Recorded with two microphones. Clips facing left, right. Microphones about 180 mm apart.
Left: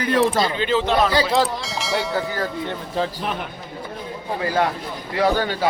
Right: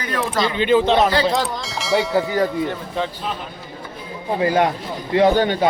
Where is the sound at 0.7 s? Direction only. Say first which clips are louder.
Right 6 dB; 25° right (ahead or behind).